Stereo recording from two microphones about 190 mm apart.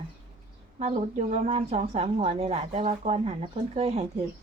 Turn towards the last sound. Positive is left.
turn(degrees=-35)  # may be behind; listen again after turning